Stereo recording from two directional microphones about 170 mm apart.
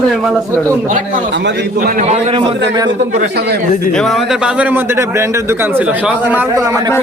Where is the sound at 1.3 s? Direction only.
90° right.